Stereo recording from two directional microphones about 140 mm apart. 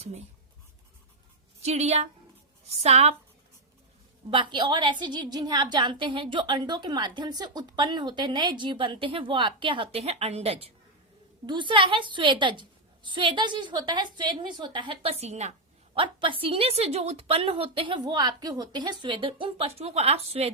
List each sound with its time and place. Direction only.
1.6 s a woman's voice: 50° right (ahead or behind)
4.3 s a woman's voice: 35° right (ahead or behind)
11.4 s a woman's voice: 35° right (ahead or behind)
15.2 s a woman's voice: 55° right (ahead or behind)
16.0 s a woman's voice: 40° right (ahead or behind)